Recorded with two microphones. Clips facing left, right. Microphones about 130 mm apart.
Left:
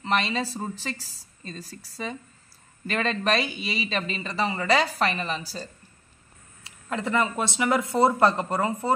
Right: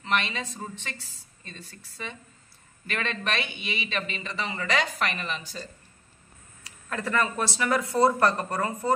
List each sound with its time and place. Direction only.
0.0 s speech: 35° left (ahead or behind)
6.6 s speech: 25° left (ahead or behind)